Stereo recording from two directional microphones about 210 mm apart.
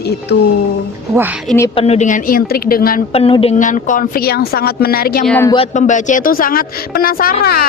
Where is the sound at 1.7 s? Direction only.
30° left (ahead or behind).